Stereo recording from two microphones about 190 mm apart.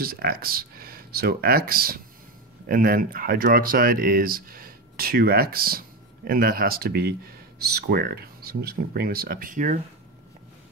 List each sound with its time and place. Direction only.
0.0 s speech: 50° right (ahead or behind)